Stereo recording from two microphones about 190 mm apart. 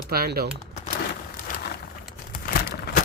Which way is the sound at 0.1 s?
55° right (ahead or behind).